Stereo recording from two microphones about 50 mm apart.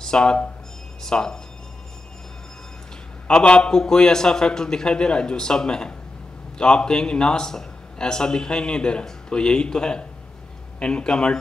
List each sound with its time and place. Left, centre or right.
0.0 s a man's voice: centre
3.3 s a man's voice: left